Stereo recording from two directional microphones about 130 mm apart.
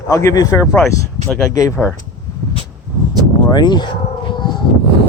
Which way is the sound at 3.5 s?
35° left (ahead or behind).